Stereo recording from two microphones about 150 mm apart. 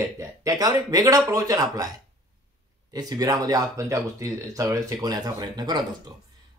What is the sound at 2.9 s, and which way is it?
Speech, 25° right (ahead or behind).